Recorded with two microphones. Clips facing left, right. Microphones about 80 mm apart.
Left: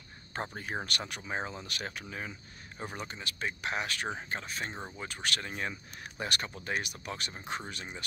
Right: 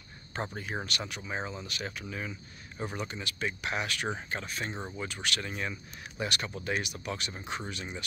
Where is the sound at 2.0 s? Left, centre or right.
Left.